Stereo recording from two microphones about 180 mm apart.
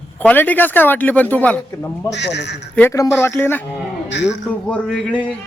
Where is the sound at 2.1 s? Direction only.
75° left (ahead or behind).